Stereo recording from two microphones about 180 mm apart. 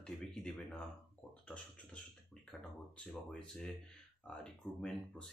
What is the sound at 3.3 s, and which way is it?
Speech, 5° left (ahead or behind).